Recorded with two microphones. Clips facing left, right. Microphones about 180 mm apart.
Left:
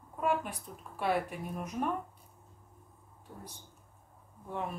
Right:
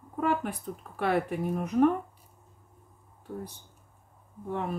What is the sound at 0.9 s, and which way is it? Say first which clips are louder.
Speech: right 4 dB; 60° right (ahead or behind).